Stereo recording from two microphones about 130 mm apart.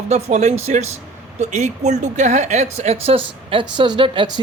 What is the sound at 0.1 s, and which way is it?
A man's voice, 60° right (ahead or behind).